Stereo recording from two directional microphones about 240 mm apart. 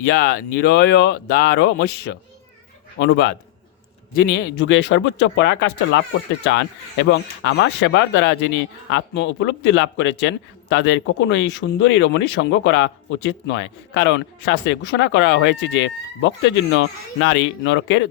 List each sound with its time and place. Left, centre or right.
0.0 s a man's voice: left